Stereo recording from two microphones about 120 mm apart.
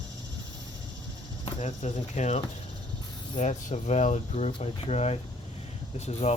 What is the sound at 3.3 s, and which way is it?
Speech, 80° left.